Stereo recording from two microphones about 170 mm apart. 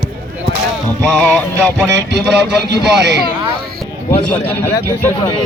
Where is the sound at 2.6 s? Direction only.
85° right.